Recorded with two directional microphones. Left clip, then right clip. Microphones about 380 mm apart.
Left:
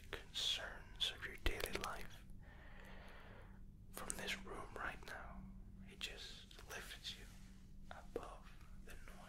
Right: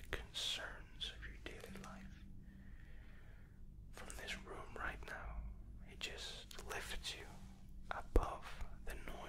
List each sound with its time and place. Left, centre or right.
0.1 s whispering: centre
0.9 s whispering: left
3.9 s whispering: centre
6.5 s a sound: right
7.9 s whispering: right